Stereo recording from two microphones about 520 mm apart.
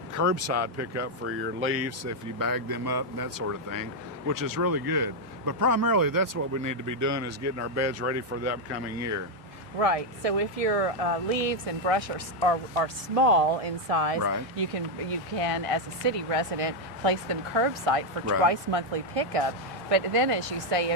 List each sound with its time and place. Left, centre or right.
0.1 s speech: right
9.7 s speech: right
14.2 s speech: right
14.5 s speech: right